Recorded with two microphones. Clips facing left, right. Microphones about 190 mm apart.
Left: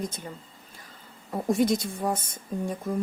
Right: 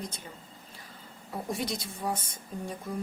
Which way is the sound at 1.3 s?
50° left (ahead or behind).